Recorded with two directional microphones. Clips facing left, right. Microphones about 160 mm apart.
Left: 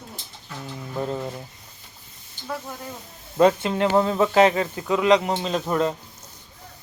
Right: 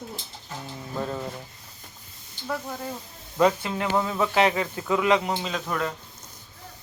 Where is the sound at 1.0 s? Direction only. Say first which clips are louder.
Left 4 dB; 20° left (ahead or behind).